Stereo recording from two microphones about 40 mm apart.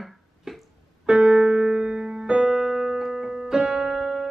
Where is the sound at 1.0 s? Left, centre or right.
Centre.